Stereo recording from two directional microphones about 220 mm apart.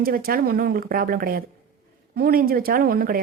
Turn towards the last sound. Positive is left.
turn(degrees=-40)  # may be behind; listen again after turning